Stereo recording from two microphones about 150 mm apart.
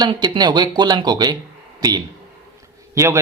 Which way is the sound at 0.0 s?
30° right (ahead or behind).